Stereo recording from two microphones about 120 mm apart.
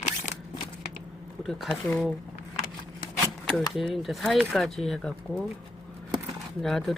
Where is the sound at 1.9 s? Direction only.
10° left (ahead or behind).